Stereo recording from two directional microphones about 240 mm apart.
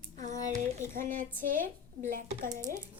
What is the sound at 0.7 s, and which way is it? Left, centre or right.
Child singing, right.